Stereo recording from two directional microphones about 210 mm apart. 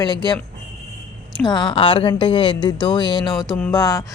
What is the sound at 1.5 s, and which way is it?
A woman's voice, 20° left (ahead or behind).